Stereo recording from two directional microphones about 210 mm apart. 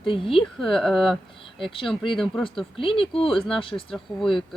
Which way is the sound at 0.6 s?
Centre (ahead or behind).